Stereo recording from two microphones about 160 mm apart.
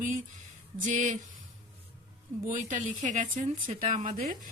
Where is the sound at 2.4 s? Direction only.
55° right (ahead or behind).